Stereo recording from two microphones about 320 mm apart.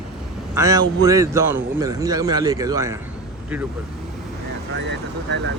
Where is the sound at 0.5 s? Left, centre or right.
Centre.